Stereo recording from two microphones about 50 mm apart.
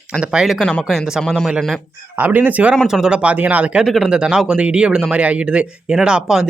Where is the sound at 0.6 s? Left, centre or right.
Centre.